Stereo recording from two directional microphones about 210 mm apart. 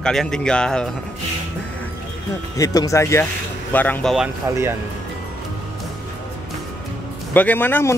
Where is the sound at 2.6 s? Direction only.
15° left (ahead or behind).